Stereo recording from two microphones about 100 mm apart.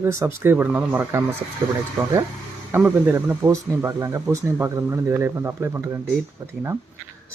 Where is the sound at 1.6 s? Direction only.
40° right (ahead or behind).